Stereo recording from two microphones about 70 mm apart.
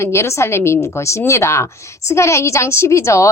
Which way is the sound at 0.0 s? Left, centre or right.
Left.